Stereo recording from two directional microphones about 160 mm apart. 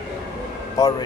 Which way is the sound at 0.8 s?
25° left (ahead or behind).